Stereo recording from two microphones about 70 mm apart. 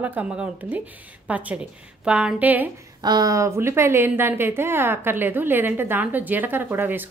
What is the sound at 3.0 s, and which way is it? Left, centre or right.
Speech, right.